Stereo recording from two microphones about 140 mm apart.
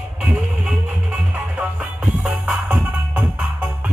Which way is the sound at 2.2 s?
10° right (ahead or behind).